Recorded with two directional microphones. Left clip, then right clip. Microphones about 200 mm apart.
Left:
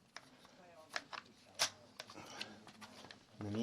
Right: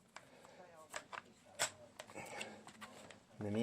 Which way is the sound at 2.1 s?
45° right (ahead or behind).